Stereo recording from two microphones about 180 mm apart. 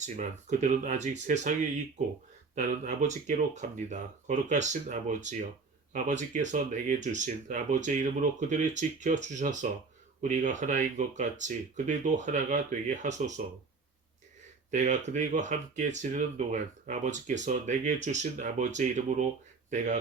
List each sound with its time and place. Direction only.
0.0 s speech: 40° right (ahead or behind)
2.6 s speech: 45° right (ahead or behind)
14.7 s speech: 40° right (ahead or behind)